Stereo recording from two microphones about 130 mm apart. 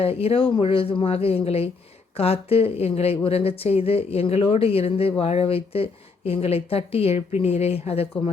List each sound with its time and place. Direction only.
0.0 s speech: 50° left (ahead or behind)